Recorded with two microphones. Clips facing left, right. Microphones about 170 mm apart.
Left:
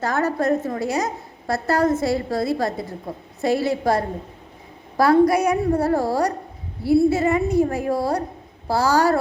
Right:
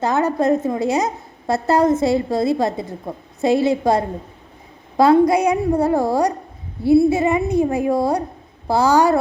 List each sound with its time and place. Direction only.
0.0 s a woman's voice: 20° right (ahead or behind)